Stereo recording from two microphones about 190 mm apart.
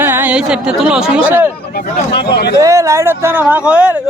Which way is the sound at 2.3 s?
60° left (ahead or behind).